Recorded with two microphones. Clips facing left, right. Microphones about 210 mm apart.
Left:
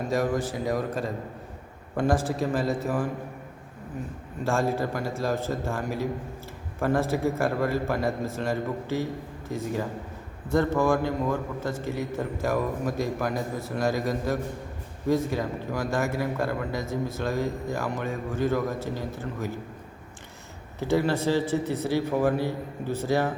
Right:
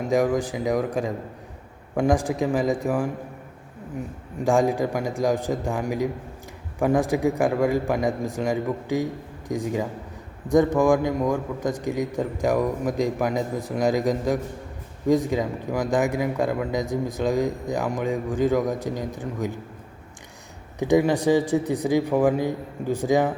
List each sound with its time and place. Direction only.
0.1 s a man's voice: 15° right (ahead or behind)
4.4 s a man's voice: 15° right (ahead or behind)
20.7 s a man's voice: 15° right (ahead or behind)